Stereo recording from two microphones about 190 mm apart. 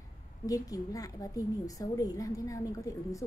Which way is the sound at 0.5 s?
20° left (ahead or behind).